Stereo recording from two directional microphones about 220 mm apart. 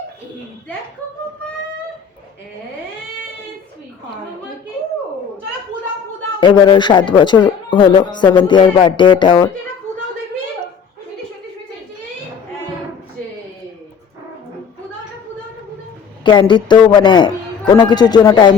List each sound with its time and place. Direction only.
6.4 s speech: 20° left (ahead or behind)
16.2 s speech: 20° left (ahead or behind)